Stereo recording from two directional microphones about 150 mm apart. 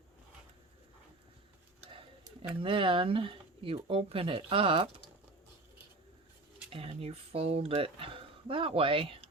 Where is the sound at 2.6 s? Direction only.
35° right (ahead or behind).